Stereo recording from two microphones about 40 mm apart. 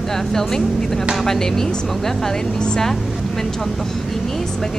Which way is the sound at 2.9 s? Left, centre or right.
Centre.